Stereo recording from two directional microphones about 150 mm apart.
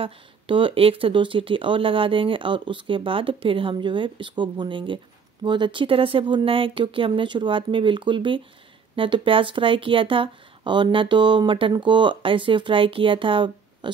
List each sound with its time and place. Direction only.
0.0 s speech: 35° right (ahead or behind)